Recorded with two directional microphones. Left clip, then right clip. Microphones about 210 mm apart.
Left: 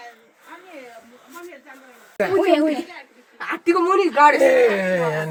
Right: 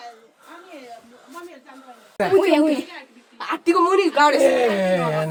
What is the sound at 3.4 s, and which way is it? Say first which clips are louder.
Speech: right 1 dB; 20° right (ahead or behind).